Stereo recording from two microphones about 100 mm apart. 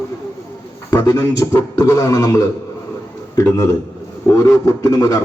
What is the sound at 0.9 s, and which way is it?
A man's voice, 35° left (ahead or behind).